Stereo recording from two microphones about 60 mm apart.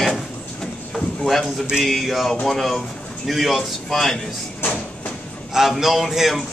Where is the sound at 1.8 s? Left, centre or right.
Centre.